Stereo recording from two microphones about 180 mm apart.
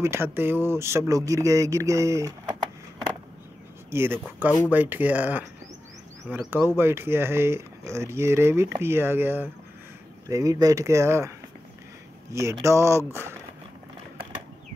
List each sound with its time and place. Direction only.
0.0 s speech: 15° right (ahead or behind)
3.9 s speech: 15° right (ahead or behind)